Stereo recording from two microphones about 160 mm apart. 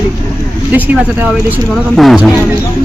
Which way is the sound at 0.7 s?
10° right (ahead or behind).